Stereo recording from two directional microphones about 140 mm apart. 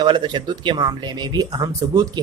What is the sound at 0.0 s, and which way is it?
A man's voice, 30° right (ahead or behind).